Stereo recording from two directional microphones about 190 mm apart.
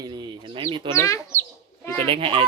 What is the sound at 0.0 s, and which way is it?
Chicken, 20° right (ahead or behind).